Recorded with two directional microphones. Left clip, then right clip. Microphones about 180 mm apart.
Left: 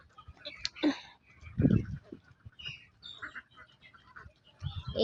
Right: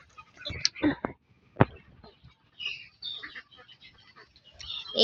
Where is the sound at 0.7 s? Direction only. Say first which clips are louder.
Even; centre (ahead or behind).